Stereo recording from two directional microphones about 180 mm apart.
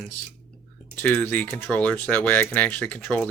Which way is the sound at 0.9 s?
10° left (ahead or behind).